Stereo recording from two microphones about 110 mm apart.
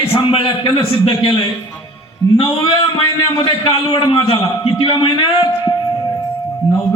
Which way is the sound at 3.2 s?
55° left (ahead or behind).